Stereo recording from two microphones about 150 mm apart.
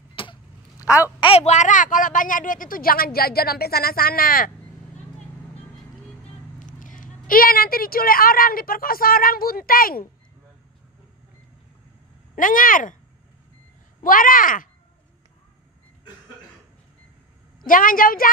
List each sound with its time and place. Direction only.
0.1 s a sound: 35° left (ahead or behind)
0.8 s speech: 10° right (ahead or behind)
1.2 s speech: 45° left (ahead or behind); by 4.5 s 75° left (ahead or behind)
6.6 s speech: 60° left (ahead or behind)
12.4 s speech: 65° left (ahead or behind)
14.0 s speech: 65° left (ahead or behind)
17.6 s speech: 65° left (ahead or behind)